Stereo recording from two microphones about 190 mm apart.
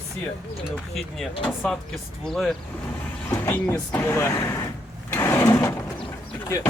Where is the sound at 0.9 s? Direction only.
Centre (ahead or behind).